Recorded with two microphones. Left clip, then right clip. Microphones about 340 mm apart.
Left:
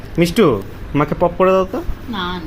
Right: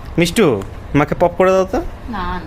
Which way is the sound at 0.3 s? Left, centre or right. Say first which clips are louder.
Left 1 dB; right.